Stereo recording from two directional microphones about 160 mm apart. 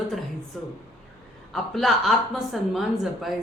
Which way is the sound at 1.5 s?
Centre (ahead or behind).